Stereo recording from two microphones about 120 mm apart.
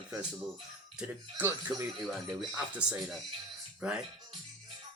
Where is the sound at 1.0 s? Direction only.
15° right (ahead or behind).